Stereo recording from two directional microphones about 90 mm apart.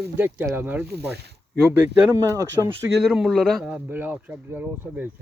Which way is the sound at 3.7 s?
20° right (ahead or behind).